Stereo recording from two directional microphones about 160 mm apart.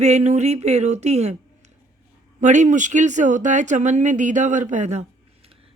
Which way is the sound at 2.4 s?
50° right (ahead or behind).